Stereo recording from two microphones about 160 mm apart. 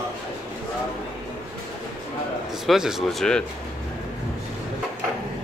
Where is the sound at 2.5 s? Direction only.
Centre (ahead or behind).